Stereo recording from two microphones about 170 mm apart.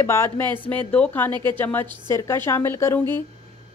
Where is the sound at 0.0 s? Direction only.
15° left (ahead or behind).